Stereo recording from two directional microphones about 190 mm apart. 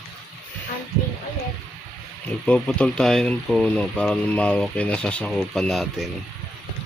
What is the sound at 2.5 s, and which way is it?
Speech, 5° left (ahead or behind).